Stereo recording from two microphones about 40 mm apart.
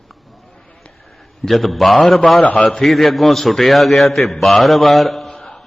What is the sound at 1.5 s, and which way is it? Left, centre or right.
Speech, centre.